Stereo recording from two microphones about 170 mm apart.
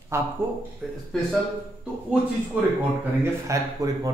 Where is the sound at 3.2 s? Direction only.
20° right (ahead or behind).